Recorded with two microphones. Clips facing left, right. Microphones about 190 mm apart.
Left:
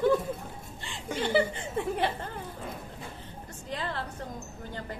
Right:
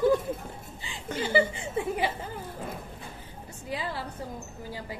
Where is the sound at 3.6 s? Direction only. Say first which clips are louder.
Right 1 dB; 5° right (ahead or behind).